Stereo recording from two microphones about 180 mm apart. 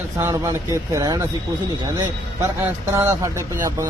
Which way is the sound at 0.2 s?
15° right (ahead or behind).